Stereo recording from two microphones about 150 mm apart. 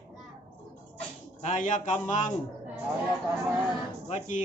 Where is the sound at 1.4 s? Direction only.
55° left (ahead or behind).